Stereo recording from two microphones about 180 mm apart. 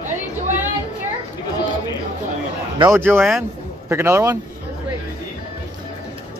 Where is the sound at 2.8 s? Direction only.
10° right (ahead or behind).